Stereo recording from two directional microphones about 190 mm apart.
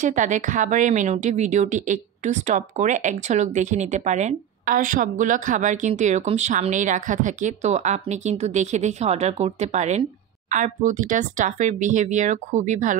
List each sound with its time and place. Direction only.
0.0 s a woman's voice: 40° right (ahead or behind)